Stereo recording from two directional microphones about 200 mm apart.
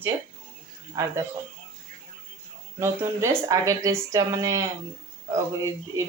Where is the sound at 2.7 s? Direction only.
15° right (ahead or behind).